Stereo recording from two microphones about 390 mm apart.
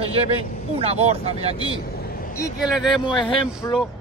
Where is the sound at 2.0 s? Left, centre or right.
Left.